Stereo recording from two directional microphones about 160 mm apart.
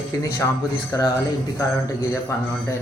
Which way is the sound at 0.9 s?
20° left (ahead or behind).